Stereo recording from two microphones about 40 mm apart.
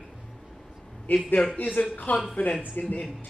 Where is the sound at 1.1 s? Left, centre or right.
Left.